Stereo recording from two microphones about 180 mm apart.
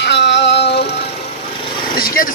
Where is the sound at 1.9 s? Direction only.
55° left (ahead or behind).